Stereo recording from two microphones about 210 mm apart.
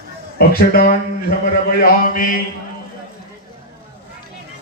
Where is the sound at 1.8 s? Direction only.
40° left (ahead or behind).